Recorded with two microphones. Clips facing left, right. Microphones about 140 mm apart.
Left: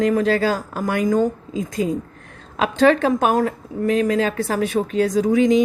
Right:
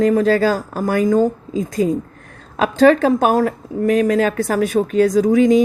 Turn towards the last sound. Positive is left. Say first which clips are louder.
# right 3 dB
turn(degrees=-40)  # may be behind; listen again after turning